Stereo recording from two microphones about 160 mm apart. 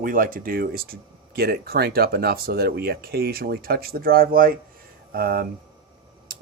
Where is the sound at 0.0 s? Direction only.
60° right (ahead or behind).